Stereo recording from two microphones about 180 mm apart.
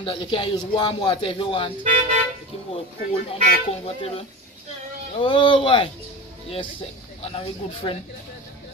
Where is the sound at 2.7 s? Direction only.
30° left (ahead or behind).